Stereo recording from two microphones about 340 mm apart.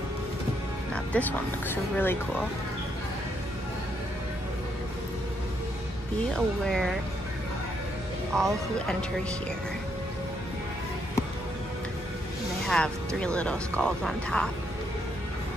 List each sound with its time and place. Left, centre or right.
0.9 s speech: centre
6.3 s speech: centre
8.3 s speech: centre
12.6 s speech: centre